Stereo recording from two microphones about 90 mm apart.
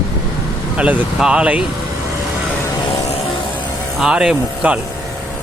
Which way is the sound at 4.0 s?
5° right (ahead or behind).